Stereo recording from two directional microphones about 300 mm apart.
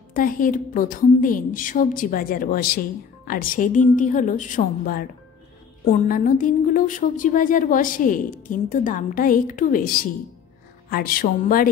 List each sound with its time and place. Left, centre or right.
0.1 s a woman's voice: left
6.0 s a woman's voice: left